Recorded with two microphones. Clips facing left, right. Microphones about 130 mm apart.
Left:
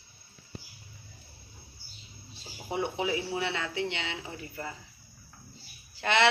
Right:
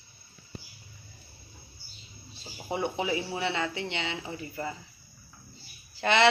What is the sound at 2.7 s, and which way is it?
Speech, centre (ahead or behind).